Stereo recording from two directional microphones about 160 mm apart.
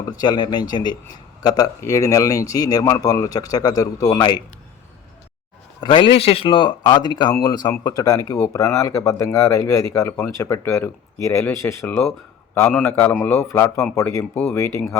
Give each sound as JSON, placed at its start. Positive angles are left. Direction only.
{"t": 0.0, "sound": "speech", "side_deg": 25}
{"t": 5.8, "sound": "speech", "side_deg": 30}